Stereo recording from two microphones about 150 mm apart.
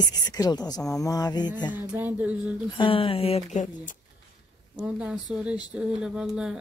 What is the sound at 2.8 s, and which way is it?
Speech, 35° left (ahead or behind).